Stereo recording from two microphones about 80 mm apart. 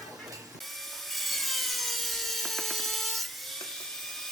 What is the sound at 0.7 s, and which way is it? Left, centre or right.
Wood, centre.